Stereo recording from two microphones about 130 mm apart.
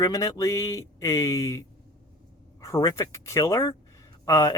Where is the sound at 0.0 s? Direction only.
25° left (ahead or behind).